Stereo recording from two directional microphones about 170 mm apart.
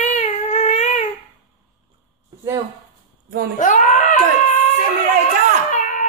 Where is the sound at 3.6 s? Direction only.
50° left (ahead or behind).